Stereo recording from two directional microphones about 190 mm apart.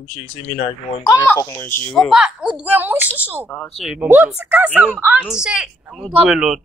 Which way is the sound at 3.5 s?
5° left (ahead or behind).